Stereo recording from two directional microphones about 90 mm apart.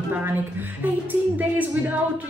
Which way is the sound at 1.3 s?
20° right (ahead or behind).